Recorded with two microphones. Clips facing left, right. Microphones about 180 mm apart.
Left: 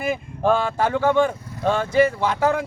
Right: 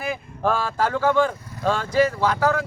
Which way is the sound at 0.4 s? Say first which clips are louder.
Left 3 dB; 20° left (ahead or behind).